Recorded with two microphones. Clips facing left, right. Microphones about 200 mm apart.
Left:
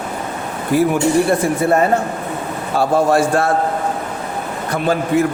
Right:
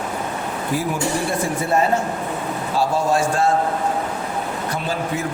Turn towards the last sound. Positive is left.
turn(degrees=55)  # may be behind; listen again after turning